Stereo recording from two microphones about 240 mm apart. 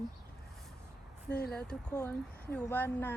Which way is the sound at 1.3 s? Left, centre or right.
Left.